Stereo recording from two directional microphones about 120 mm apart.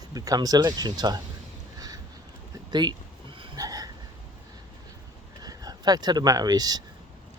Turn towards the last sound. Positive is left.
turn(degrees=-35)  # may be behind; listen again after turning